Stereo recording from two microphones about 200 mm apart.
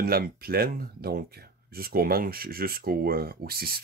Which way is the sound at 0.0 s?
50° right (ahead or behind).